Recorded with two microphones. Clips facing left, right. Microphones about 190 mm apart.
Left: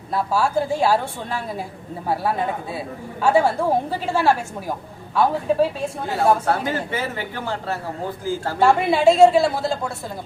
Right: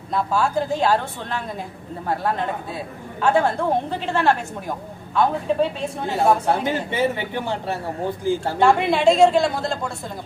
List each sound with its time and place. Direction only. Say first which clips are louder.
0.1 s a woman's voice: left 1 dB; 5° left (ahead or behind)
6.1 s speech: even; 20° right (ahead or behind)
8.5 s a woman's voice: left 2 dB; 5° left (ahead or behind)